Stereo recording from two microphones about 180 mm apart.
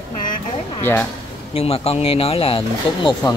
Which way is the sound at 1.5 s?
35° left (ahead or behind).